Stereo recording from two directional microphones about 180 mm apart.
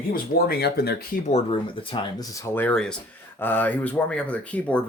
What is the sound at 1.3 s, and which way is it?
Speech, 30° left (ahead or behind).